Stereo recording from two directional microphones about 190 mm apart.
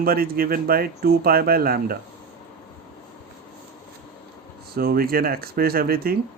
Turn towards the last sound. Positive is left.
turn(degrees=-50)  # may be behind; listen again after turning